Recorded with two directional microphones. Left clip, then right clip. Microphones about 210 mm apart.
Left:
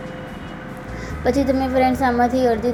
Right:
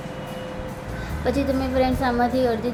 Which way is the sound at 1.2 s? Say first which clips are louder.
Left 5 dB; 15° left (ahead or behind).